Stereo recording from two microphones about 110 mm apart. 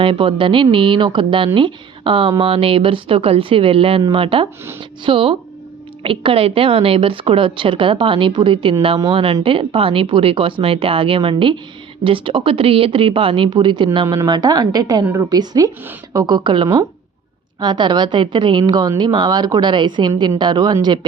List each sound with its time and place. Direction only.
0.0 s a woman's voice: 55° right (ahead or behind)
9.0 s a woman's voice: 55° right (ahead or behind)